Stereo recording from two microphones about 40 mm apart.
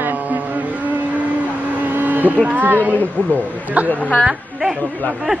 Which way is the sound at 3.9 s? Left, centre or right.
Left.